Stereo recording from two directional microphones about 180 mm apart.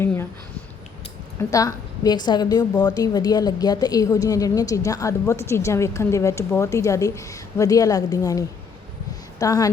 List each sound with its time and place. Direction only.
1.4 s a woman's voice: 20° left (ahead or behind)